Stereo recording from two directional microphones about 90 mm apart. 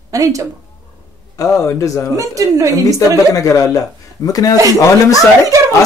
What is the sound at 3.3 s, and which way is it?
Speech, 40° left (ahead or behind).